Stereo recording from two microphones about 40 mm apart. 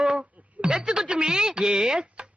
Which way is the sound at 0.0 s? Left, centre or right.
Right.